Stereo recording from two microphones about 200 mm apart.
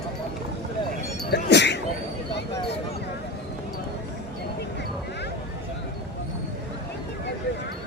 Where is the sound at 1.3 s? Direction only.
60° left (ahead or behind).